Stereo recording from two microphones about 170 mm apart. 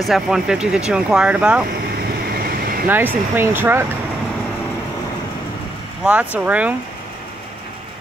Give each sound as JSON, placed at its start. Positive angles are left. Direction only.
{"t": 0.0, "sound": "speech", "side_deg": 0}
{"t": 2.3, "sound": "vehicle", "side_deg": -60}
{"t": 2.9, "sound": "speech", "side_deg": -10}
{"t": 6.4, "sound": "speech", "side_deg": -10}